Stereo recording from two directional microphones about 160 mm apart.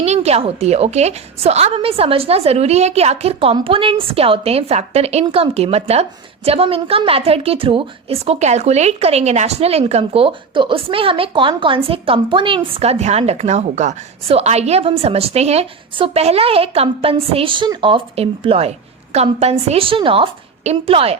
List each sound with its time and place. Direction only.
0.0 s a woman's voice: 40° right (ahead or behind)